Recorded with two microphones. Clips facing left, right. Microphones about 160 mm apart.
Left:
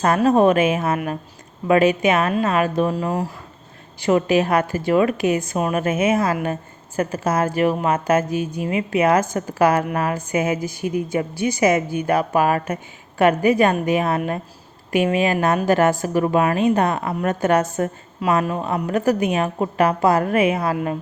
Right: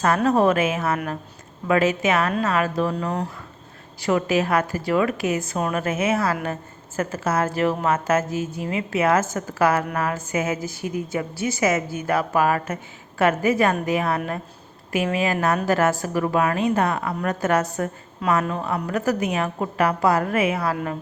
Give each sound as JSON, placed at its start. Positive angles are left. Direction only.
{"t": 0.0, "sound": "a woman's voice", "side_deg": 20}
{"t": 4.0, "sound": "a woman's voice", "side_deg": 20}